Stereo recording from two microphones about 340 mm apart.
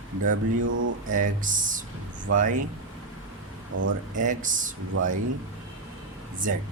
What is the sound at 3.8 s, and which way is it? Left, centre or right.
Speech, right.